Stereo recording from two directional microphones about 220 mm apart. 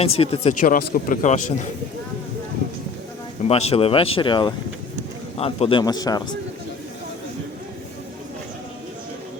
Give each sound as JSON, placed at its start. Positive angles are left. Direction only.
{"t": 0.0, "sound": "speech", "side_deg": 25}
{"t": 3.4, "sound": "speech", "side_deg": 25}